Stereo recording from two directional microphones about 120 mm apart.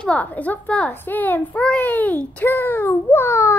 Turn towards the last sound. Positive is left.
turn(degrees=20)  # may be behind; listen again after turning